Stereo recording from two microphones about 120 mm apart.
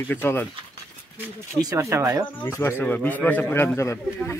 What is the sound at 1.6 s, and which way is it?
Speech, 25° right (ahead or behind).